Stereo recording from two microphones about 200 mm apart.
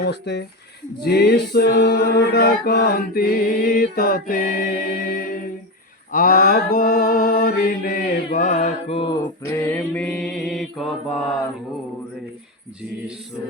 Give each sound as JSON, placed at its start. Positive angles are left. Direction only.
{"t": 0.0, "sound": "speech", "side_deg": 55}
{"t": 1.0, "sound": "music", "side_deg": 55}
{"t": 6.1, "sound": "mantra", "side_deg": 45}
{"t": 9.6, "sound": "mantra", "side_deg": 10}